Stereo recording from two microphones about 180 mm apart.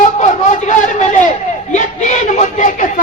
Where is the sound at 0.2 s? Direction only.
45° left (ahead or behind).